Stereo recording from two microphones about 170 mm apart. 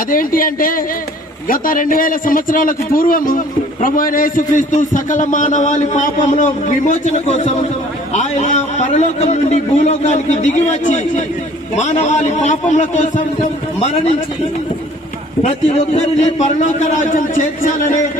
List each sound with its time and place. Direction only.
0.1 s a man's voice: 55° left (ahead or behind)
15.4 s a man's voice: 40° left (ahead or behind)